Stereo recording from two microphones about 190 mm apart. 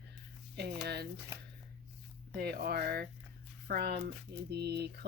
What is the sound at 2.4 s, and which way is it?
A woman's voice, 55° right (ahead or behind).